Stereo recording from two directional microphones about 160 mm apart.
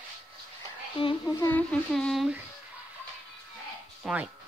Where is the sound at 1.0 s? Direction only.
30° left (ahead or behind).